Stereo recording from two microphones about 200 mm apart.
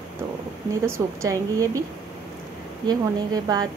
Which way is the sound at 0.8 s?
15° right (ahead or behind).